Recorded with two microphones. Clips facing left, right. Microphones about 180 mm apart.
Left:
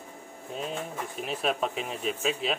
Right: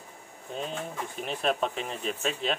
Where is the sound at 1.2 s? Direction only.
5° left (ahead or behind).